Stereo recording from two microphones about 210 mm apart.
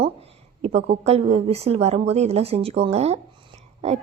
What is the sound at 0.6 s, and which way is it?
A woman's voice, 30° right (ahead or behind).